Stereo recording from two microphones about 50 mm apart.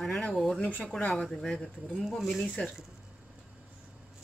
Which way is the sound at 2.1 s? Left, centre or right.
Centre.